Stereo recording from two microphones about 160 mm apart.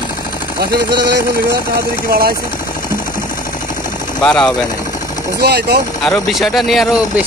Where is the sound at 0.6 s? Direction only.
85° right.